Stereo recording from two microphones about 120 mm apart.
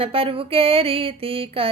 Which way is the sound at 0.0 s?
50° right (ahead or behind).